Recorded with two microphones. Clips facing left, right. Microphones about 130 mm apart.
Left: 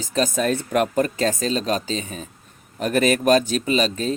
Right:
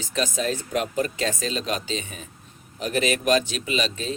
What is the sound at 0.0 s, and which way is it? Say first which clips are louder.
Speech: left 5 dB; 40° left (ahead or behind).